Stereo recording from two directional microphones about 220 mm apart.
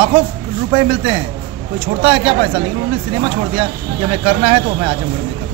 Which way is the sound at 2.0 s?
25° right (ahead or behind).